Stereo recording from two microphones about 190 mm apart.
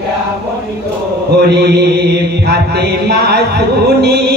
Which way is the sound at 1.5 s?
60° right (ahead or behind).